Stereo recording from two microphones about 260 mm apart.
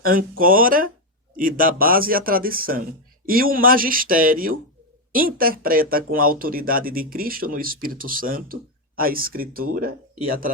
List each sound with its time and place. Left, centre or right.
0.0 s speech: right